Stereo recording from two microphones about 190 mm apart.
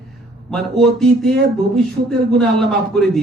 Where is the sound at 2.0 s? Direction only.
50° right (ahead or behind).